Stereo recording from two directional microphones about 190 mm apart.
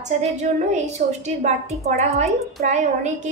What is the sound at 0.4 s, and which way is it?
A woman's voice, 40° right (ahead or behind).